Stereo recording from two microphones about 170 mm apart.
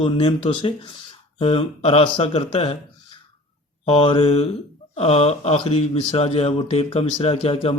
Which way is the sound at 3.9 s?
35° left (ahead or behind).